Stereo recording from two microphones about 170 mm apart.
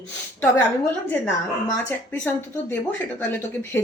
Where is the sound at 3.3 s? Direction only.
15° left (ahead or behind).